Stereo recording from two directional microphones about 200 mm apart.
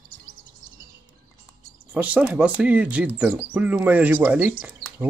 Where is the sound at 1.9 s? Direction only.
5° right (ahead or behind).